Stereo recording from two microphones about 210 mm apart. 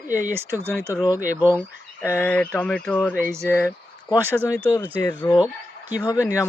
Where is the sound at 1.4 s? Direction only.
10° right (ahead or behind).